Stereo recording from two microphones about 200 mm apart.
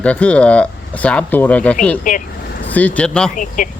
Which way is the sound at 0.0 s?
5° left (ahead or behind).